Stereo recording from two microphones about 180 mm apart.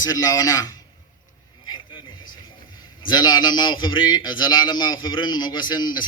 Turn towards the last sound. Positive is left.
turn(degrees=25)  # may be behind; listen again after turning